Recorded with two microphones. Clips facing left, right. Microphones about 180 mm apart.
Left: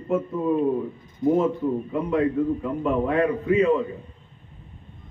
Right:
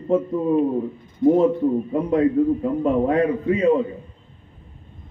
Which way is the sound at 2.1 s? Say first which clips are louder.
Right 4 dB; 35° right (ahead or behind).